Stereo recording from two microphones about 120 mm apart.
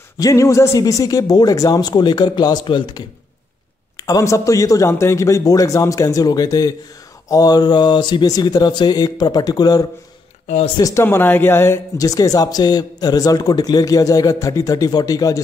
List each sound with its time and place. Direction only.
0.2 s speech: 25° left (ahead or behind)
3.9 s a man's voice: 25° left (ahead or behind)
11.1 s speech: 15° left (ahead or behind)